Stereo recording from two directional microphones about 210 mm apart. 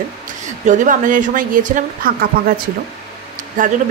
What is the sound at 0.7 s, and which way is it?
Speech, 40° right (ahead or behind).